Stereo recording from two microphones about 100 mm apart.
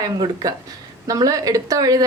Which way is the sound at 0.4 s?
35° right (ahead or behind).